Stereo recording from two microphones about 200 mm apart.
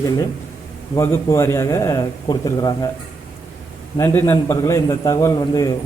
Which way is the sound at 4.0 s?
10° left (ahead or behind).